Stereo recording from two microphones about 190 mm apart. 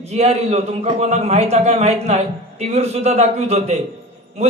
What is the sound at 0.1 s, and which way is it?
A man's voice, 35° right (ahead or behind).